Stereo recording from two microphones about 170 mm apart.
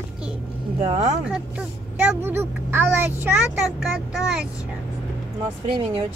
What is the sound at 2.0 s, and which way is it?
A child's voice, 10° right (ahead or behind).